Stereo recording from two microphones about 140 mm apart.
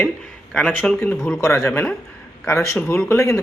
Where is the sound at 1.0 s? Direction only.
20° left (ahead or behind).